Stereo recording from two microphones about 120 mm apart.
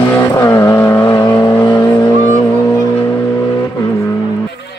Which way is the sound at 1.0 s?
35° left (ahead or behind).